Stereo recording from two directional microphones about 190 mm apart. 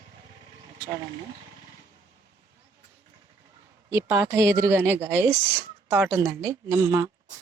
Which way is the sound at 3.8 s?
15° right (ahead or behind).